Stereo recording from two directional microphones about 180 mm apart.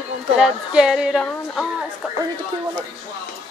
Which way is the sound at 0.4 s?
5° right (ahead or behind).